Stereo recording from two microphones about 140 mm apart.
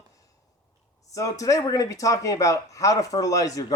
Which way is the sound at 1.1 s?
25° left (ahead or behind).